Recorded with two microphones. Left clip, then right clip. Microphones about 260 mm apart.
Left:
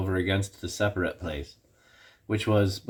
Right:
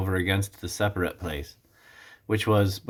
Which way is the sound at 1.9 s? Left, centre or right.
Centre.